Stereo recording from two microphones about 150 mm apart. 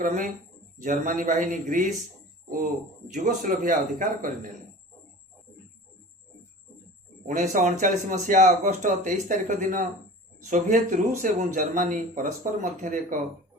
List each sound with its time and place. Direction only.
0.8 s speech: 60° right (ahead or behind)
3.1 s speech: 60° right (ahead or behind)
7.3 s speech: 55° right (ahead or behind)